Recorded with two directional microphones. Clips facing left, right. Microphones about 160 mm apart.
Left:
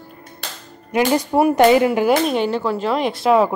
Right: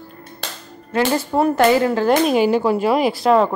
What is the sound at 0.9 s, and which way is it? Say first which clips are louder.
A woman's voice: left 1 dB; 15° left (ahead or behind).